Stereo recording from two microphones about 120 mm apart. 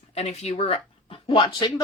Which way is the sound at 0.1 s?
60° left (ahead or behind).